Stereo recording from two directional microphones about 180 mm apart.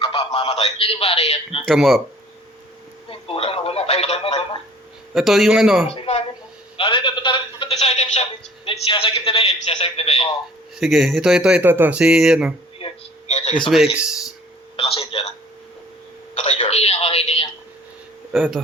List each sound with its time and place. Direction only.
0.0 s a man's voice: 30° left (ahead or behind)
1.6 s speech: centre (ahead or behind)
3.1 s telephone: 30° left (ahead or behind)
5.1 s speech: centre (ahead or behind)
5.9 s a man's voice: 35° left (ahead or behind)
10.8 s speech: centre (ahead or behind)
12.8 s a sound: 35° left (ahead or behind)
13.7 s speech: centre (ahead or behind)
14.8 s a man's voice: 30° left (ahead or behind)
16.3 s a man's voice: 40° left (ahead or behind)
18.3 s speech: centre (ahead or behind)